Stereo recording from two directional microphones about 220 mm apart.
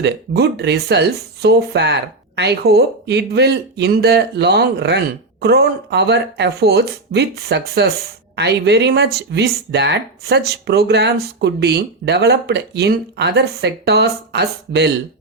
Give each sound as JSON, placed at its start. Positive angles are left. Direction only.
{"t": 0.0, "sound": "speech", "side_deg": -50}